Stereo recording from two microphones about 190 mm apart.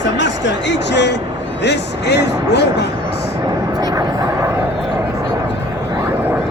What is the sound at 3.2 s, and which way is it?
Vehicle, 20° right (ahead or behind).